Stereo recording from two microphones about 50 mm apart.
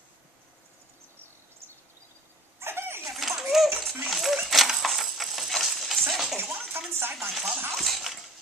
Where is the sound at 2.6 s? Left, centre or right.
Right.